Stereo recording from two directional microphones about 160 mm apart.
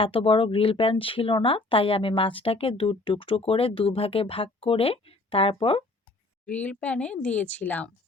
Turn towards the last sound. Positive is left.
turn(degrees=10)  # may be behind; listen again after turning